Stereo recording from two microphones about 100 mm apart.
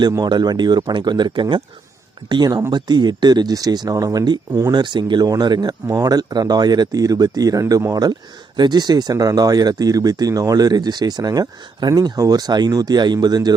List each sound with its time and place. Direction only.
0.2 s speech: 45° right (ahead or behind)
2.3 s speech: 40° right (ahead or behind)
4.7 s speech: 50° right (ahead or behind)